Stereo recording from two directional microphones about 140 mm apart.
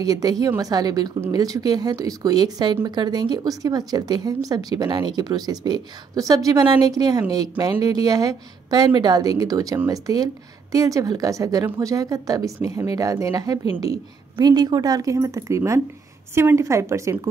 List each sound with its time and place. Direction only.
0.0 s speech: 25° right (ahead or behind)